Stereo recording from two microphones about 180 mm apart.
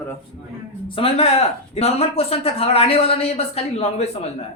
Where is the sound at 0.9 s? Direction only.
30° left (ahead or behind).